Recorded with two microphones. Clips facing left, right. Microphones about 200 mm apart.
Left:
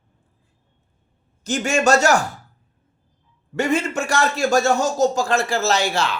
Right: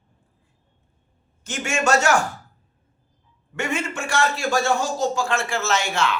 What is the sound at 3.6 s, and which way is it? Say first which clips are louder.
A woman's voice: left 6 dB; 40° left (ahead or behind).